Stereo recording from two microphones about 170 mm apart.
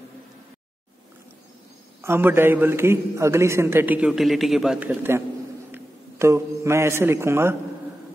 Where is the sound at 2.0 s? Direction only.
15° right (ahead or behind).